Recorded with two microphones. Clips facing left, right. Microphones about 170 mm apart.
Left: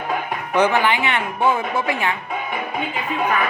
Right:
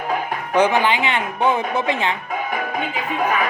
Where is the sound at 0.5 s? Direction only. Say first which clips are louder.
Right 1 dB; 15° right (ahead or behind).